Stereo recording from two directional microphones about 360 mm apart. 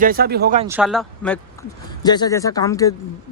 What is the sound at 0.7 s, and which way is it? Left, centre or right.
Speech, centre.